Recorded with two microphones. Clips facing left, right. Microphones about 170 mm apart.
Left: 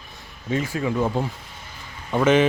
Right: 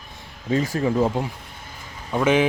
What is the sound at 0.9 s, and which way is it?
Speech, 20° right (ahead or behind).